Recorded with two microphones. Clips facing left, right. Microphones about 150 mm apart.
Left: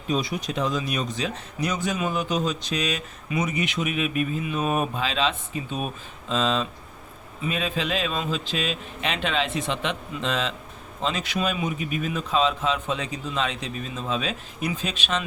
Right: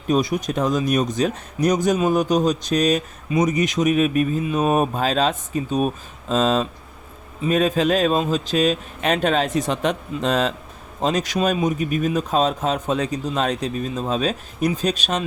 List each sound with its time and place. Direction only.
0.1 s a man's voice: 45° right (ahead or behind)